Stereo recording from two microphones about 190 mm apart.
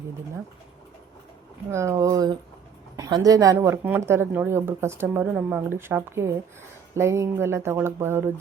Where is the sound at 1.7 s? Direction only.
15° right (ahead or behind).